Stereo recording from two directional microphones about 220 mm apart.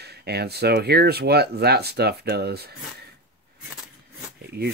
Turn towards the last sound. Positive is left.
turn(degrees=-45)  # may be behind; listen again after turning